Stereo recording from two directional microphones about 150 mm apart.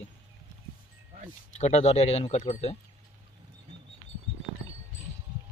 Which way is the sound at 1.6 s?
50° left (ahead or behind).